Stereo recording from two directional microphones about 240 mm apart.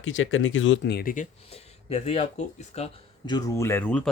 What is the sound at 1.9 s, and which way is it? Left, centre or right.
Speech, left.